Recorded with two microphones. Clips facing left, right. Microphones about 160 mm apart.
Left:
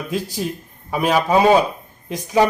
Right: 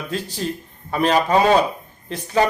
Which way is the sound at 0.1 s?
10° left (ahead or behind).